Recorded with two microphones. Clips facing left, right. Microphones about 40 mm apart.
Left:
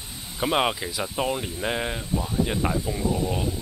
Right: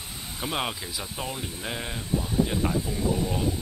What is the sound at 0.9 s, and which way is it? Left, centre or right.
Speech, centre.